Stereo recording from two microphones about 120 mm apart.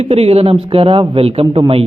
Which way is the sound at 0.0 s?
55° right (ahead or behind).